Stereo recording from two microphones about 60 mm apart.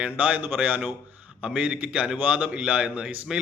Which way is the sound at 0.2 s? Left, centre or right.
Right.